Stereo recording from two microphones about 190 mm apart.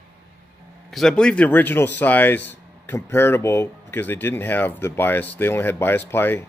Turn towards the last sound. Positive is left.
turn(degrees=10)  # may be behind; listen again after turning